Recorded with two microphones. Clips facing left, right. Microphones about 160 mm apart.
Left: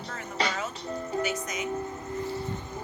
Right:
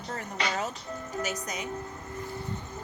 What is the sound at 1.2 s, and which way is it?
Speech, 35° right (ahead or behind).